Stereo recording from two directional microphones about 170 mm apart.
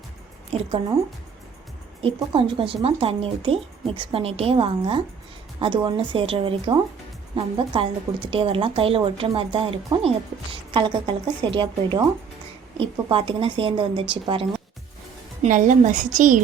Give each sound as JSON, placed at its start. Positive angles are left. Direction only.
{"t": 2.0, "sound": "a woman's voice", "side_deg": -30}
{"t": 15.4, "sound": "a woman's voice", "side_deg": -50}